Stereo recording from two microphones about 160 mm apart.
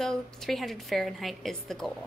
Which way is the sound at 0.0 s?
Centre (ahead or behind).